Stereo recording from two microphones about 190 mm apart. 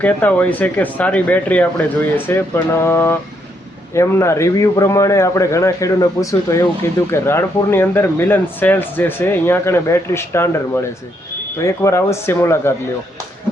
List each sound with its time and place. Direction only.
0.0 s speech: 10° left (ahead or behind)